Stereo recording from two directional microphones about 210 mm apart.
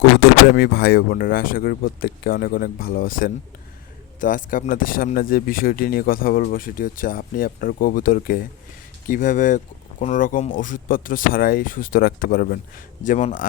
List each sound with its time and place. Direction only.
0.5 s speech: 50° left (ahead or behind)